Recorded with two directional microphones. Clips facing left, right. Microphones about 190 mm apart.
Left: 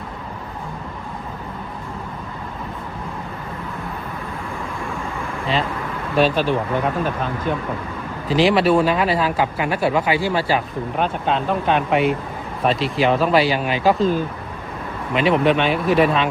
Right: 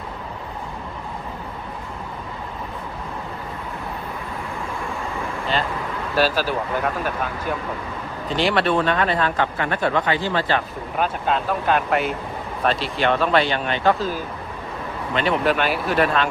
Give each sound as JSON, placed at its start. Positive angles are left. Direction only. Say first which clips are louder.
{"t": 6.1, "sound": "speech", "louder": "left 3 dB", "side_deg": -5}
{"t": 11.0, "sound": "speech", "louder": "even", "side_deg": 0}
{"t": 15.1, "sound": "speech", "louder": "left 4 dB", "side_deg": 0}